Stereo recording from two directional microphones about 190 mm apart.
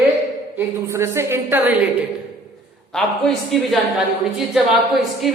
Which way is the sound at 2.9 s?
5° left (ahead or behind).